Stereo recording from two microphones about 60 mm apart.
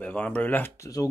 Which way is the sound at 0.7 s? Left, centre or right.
Left.